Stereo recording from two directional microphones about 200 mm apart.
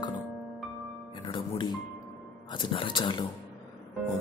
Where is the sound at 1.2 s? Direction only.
25° left (ahead or behind).